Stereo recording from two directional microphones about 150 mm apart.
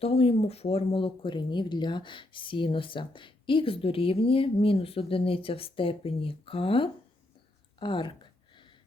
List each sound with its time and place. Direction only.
0.0 s speech: 40° left (ahead or behind)